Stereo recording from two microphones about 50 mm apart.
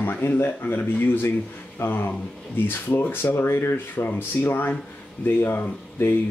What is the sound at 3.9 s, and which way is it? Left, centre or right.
Speech, left.